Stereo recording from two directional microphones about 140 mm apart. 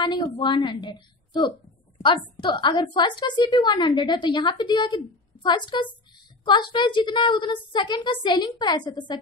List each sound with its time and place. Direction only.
0.0 s a woman's voice: 35° left (ahead or behind)